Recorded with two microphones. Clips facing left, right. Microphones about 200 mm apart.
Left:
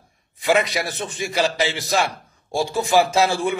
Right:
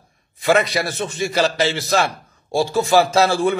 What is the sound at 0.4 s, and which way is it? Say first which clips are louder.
A man's voice: right 2 dB; 15° left (ahead or behind).